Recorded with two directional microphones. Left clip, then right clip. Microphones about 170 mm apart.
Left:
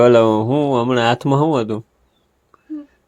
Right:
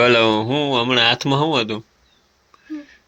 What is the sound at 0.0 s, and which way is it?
Speech, 35° left (ahead or behind).